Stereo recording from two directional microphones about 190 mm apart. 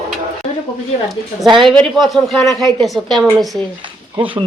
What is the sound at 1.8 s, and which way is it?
Speech, centre (ahead or behind).